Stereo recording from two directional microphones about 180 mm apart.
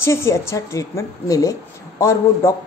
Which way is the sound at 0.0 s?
15° left (ahead or behind).